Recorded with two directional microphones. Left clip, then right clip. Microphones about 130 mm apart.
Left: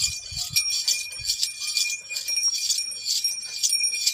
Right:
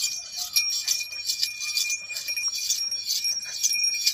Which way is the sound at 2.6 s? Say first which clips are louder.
Left 1 dB; 40° left (ahead or behind).